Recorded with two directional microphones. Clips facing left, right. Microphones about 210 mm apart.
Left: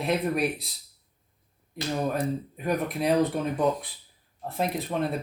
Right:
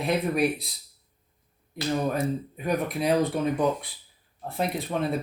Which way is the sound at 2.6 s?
Centre (ahead or behind).